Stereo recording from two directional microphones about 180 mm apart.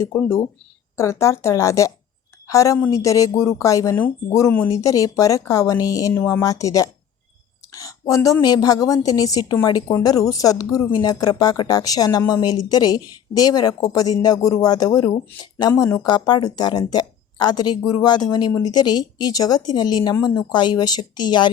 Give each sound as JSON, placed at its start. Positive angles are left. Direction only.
{"t": 0.0, "sound": "a woman's voice", "side_deg": 10}